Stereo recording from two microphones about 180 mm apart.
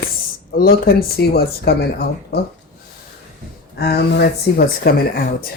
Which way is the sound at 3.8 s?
65° left (ahead or behind).